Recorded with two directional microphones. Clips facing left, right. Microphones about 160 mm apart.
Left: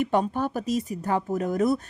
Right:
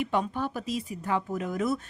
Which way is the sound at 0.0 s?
45° left (ahead or behind).